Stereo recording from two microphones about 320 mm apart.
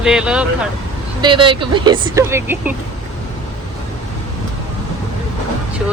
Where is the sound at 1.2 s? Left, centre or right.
Centre.